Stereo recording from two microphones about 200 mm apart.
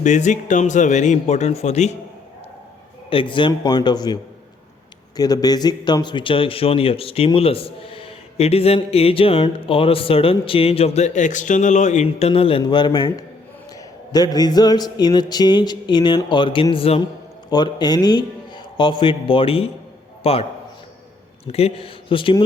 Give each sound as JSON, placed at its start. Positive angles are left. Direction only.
{"t": 0.0, "sound": "speech", "side_deg": 35}
{"t": 3.1, "sound": "a man's voice", "side_deg": 25}
{"t": 21.4, "sound": "a man's voice", "side_deg": 30}